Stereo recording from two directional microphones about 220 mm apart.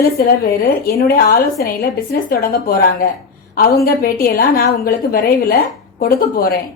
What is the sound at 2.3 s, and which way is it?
A woman's voice, 40° left (ahead or behind).